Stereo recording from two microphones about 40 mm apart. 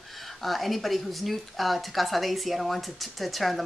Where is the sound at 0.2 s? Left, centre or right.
Centre.